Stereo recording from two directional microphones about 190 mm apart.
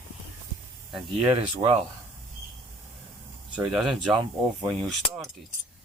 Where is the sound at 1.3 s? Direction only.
30° right (ahead or behind).